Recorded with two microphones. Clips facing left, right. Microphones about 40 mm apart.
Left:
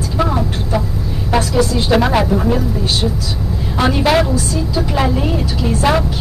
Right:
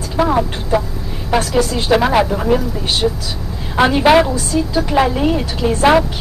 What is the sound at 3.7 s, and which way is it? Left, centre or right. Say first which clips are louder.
Speech: right 3 dB; right.